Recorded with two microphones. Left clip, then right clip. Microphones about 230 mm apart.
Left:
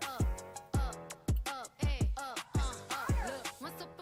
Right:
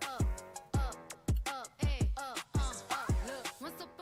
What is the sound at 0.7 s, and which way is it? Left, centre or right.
Music, centre.